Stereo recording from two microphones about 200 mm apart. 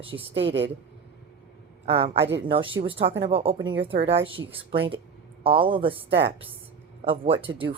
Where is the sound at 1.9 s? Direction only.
30° right (ahead or behind).